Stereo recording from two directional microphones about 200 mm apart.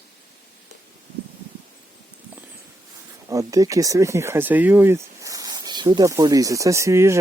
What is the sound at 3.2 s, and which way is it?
Speech, 15° right (ahead or behind).